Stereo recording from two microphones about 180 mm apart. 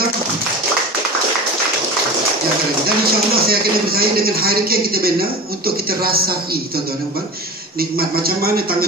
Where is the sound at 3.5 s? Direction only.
55° right (ahead or behind).